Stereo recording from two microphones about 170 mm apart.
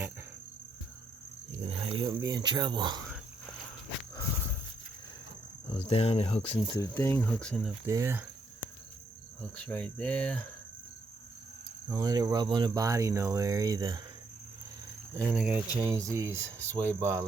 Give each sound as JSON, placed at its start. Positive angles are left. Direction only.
{"t": 1.5, "sound": "a sound", "side_deg": -35}
{"t": 2.2, "sound": "speech", "side_deg": -25}
{"t": 5.8, "sound": "cricket", "side_deg": 35}
{"t": 6.7, "sound": "cricket", "side_deg": 15}
{"t": 7.9, "sound": "speech", "side_deg": -15}
{"t": 9.4, "sound": "cricket", "side_deg": 10}
{"t": 11.9, "sound": "speech", "side_deg": -20}
{"t": 15.2, "sound": "speech", "side_deg": -5}